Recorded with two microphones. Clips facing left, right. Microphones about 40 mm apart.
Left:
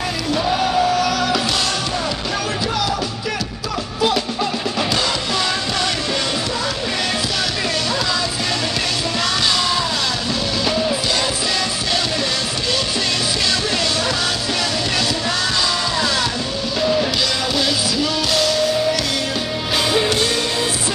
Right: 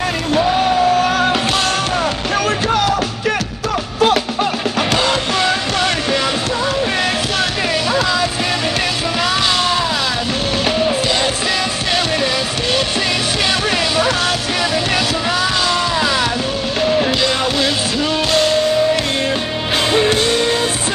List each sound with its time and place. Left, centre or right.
0.9 s music: right
4.0 s music: right
18.3 s music: right
20.1 s music: right